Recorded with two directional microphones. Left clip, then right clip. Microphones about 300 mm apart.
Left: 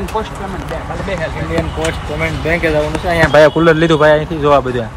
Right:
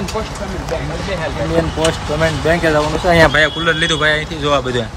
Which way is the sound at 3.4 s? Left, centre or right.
Centre.